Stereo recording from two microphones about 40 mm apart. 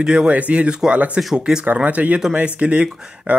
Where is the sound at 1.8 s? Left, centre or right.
Right.